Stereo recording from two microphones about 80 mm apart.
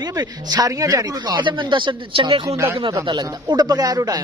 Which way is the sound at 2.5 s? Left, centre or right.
Right.